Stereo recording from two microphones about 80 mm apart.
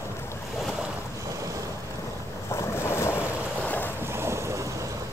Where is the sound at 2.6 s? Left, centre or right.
Left.